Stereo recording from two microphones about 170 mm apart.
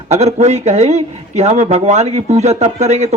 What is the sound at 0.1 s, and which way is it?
Speech, 40° right (ahead or behind).